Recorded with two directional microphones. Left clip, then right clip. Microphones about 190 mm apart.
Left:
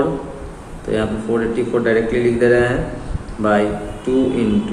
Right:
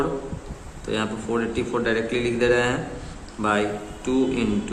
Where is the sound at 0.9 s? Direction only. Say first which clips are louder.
Left 6 dB; 40° right (ahead or behind).